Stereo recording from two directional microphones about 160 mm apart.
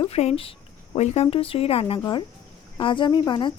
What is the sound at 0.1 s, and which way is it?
Speech, 40° left (ahead or behind).